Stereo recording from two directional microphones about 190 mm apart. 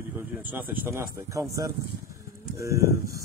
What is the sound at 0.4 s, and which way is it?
Speech, 10° right (ahead or behind).